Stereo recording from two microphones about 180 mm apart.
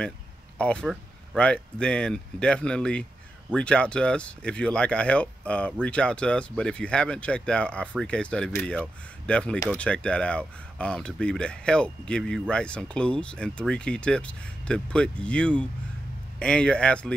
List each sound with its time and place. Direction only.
0.6 s speech: 5° left (ahead or behind)